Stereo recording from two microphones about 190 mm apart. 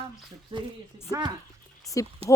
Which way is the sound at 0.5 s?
30° right (ahead or behind).